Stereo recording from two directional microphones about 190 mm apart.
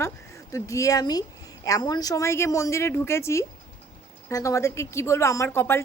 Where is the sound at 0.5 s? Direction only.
15° left (ahead or behind).